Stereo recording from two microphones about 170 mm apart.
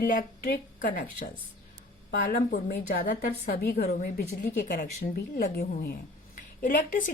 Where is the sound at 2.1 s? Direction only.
65° left (ahead or behind).